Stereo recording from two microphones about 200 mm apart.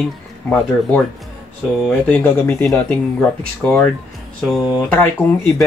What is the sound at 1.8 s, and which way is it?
Speech, 5° left (ahead or behind).